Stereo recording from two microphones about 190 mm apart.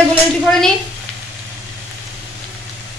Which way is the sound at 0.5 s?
5° left (ahead or behind).